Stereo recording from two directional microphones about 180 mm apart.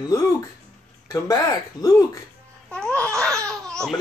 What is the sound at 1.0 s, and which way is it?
Speech, 20° left (ahead or behind).